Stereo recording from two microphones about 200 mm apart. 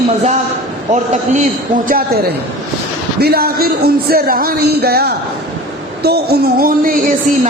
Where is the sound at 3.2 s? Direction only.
50° right (ahead or behind).